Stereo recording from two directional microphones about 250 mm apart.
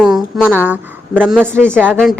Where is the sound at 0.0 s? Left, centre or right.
Centre.